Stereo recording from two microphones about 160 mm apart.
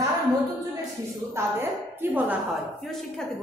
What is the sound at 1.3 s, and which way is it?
A woman's voice, 15° right (ahead or behind).